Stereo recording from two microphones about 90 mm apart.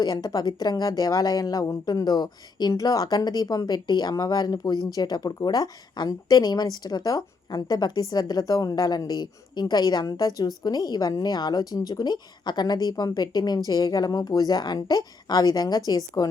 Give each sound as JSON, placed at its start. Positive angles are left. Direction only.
{"t": 0.0, "sound": "speech", "side_deg": 45}